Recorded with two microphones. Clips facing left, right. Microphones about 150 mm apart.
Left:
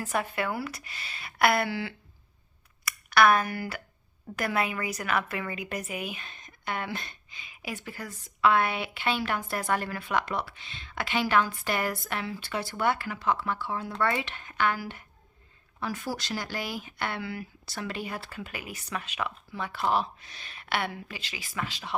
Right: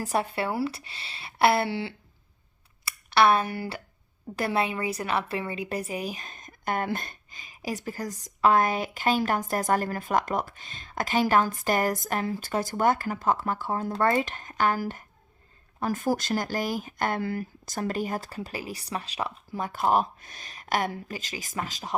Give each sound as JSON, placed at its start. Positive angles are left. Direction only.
{"t": 0.0, "sound": "a woman's voice", "side_deg": -35}